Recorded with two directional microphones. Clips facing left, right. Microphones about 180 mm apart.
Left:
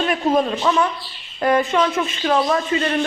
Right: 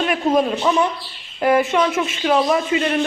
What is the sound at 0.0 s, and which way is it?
Speech, centre (ahead or behind).